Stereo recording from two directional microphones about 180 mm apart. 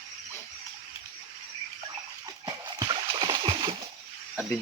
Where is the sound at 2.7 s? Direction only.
25° right (ahead or behind).